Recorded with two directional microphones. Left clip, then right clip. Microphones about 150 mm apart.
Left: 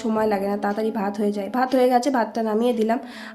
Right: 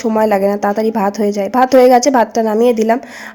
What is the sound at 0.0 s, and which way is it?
A woman's voice, 45° right (ahead or behind).